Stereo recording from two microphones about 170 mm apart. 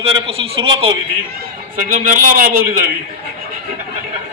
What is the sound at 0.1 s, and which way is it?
Speech, 35° right (ahead or behind).